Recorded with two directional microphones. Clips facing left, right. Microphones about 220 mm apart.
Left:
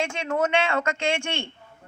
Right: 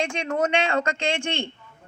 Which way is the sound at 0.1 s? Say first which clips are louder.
Even; 35° right (ahead or behind).